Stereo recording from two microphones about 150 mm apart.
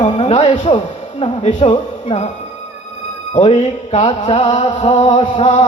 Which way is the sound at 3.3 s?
45° left (ahead or behind).